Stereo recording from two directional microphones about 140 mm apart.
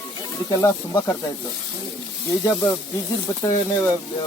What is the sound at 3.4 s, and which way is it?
Speech, 25° left (ahead or behind).